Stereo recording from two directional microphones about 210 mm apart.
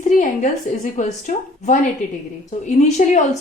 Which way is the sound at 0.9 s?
35° left (ahead or behind).